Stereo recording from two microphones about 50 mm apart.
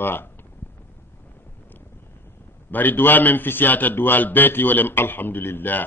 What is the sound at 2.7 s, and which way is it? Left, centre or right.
A man's voice, left.